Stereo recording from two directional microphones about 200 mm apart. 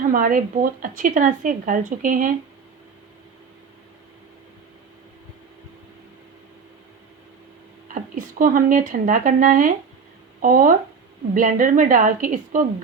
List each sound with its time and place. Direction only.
0.1 s speech: 45° right (ahead or behind)
7.9 s a woman's voice: 40° right (ahead or behind)